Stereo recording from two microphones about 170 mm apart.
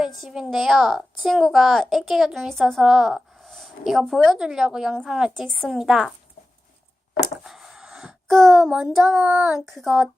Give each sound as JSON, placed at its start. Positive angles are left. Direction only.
{"t": 0.2, "sound": "a child's voice", "side_deg": -5}
{"t": 7.4, "sound": "a child's voice", "side_deg": -5}